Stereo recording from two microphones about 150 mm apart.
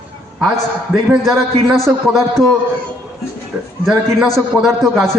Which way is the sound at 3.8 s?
Centre (ahead or behind).